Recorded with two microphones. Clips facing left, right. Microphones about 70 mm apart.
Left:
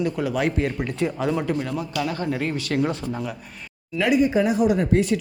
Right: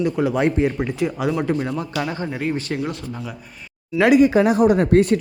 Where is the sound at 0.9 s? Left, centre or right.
Centre.